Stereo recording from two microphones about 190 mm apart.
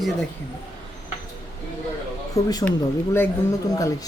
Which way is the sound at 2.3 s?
15° left (ahead or behind).